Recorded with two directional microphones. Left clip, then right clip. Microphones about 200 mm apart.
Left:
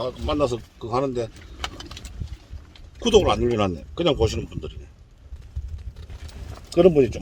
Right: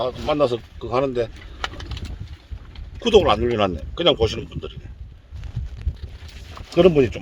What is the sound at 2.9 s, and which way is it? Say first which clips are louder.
Speech: right 2 dB; 5° left (ahead or behind).